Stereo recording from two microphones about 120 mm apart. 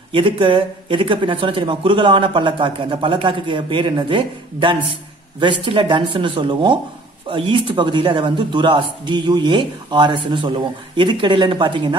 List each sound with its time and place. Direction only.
0.1 s a man's voice: 45° right (ahead or behind)